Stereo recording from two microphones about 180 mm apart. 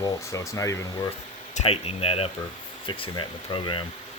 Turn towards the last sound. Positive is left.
turn(degrees=25)  # may be behind; listen again after turning